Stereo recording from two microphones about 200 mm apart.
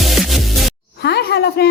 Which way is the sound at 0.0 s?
Centre (ahead or behind).